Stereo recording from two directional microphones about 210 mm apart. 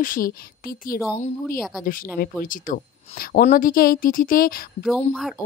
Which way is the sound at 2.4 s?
40° left (ahead or behind).